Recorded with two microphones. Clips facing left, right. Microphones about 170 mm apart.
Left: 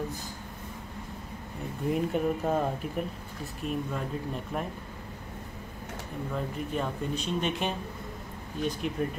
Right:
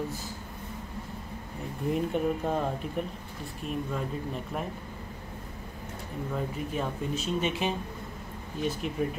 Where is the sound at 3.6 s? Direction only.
Centre (ahead or behind).